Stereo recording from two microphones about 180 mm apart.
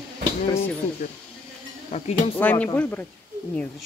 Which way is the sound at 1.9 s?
35° left (ahead or behind).